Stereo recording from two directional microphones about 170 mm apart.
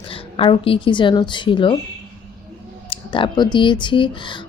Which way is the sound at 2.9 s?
30° left (ahead or behind).